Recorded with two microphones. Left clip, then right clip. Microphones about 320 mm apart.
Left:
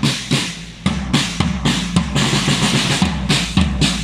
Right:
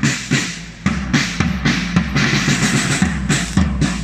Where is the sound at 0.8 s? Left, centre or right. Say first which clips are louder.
Right 1 dB; centre.